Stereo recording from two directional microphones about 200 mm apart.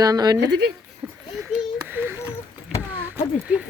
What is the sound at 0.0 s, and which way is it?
Speech, 20° right (ahead or behind).